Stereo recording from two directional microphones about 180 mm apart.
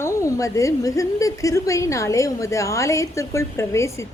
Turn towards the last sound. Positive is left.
turn(degrees=15)  # may be behind; listen again after turning